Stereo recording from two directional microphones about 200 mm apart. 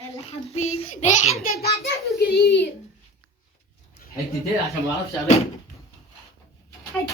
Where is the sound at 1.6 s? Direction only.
55° left (ahead or behind).